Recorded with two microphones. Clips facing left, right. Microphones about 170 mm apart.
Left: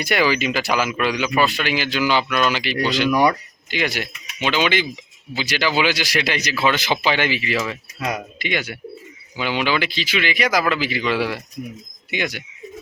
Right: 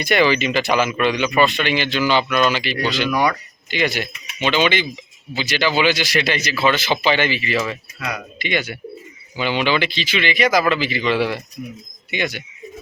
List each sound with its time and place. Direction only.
0.0 s speech: 5° left (ahead or behind)
7.9 s speech: 35° left (ahead or behind)
8.4 s speech: 10° left (ahead or behind)